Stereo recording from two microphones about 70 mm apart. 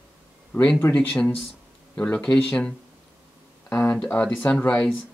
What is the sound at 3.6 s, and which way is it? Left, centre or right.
Speech, left.